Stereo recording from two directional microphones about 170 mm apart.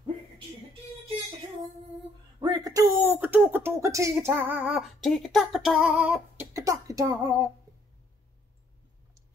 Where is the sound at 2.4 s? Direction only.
20° right (ahead or behind).